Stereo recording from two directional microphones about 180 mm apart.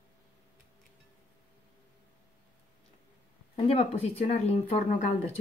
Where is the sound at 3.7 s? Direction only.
35° left (ahead or behind).